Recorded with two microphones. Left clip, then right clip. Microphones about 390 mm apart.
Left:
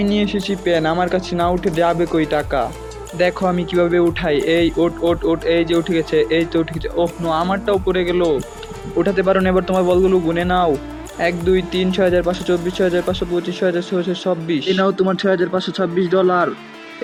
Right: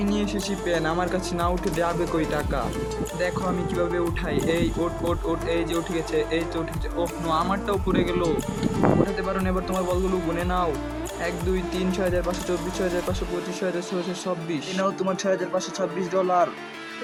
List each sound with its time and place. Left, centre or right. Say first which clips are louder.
0.1 s speech: left 7 dB; right